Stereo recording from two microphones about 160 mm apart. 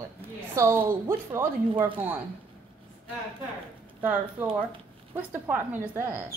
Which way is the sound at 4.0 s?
10° right (ahead or behind).